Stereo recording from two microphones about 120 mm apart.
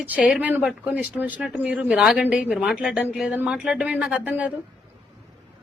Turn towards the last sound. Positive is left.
turn(degrees=-10)  # may be behind; listen again after turning